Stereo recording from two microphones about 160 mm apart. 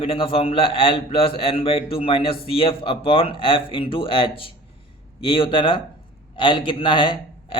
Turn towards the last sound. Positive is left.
turn(degrees=30)  # may be behind; listen again after turning